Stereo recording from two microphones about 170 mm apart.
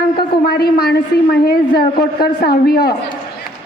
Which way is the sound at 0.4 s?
65° left (ahead or behind).